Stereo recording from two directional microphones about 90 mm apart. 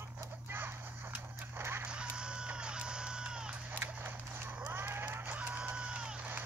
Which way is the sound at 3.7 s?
20° right (ahead or behind).